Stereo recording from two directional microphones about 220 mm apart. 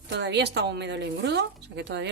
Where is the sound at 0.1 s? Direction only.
50° right (ahead or behind).